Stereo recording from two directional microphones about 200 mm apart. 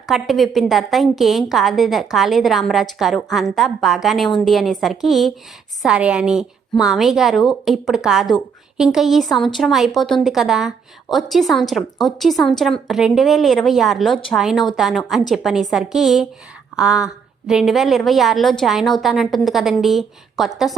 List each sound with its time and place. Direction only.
0.0 s a woman's voice: centre (ahead or behind)